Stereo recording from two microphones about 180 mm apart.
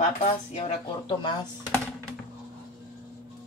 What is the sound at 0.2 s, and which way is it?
Speech, 35° left (ahead or behind).